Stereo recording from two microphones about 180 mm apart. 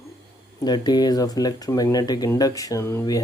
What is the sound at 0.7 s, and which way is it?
Mantra, 25° left (ahead or behind).